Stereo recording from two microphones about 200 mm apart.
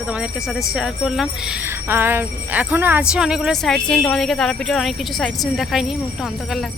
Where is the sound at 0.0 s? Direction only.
5° right (ahead or behind).